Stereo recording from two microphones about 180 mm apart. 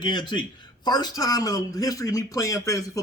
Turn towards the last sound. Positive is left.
turn(degrees=20)  # may be behind; listen again after turning